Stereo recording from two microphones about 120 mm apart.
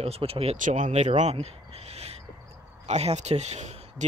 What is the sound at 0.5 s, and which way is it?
Speech, 90° right.